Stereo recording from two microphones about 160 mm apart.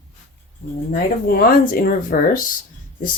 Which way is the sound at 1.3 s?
65° left (ahead or behind).